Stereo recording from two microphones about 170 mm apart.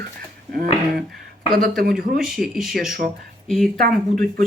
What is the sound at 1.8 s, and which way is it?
Speech, 65° right (ahead or behind).